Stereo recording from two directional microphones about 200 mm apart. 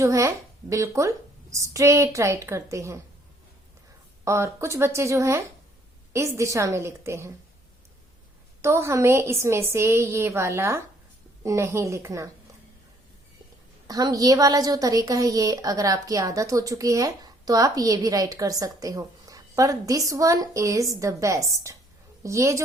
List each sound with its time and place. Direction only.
0.0 s a woman's voice: 15° right (ahead or behind)
4.2 s a woman's voice: 15° right (ahead or behind)
8.6 s a woman's voice: 15° right (ahead or behind)
13.8 s a woman's voice: 20° right (ahead or behind)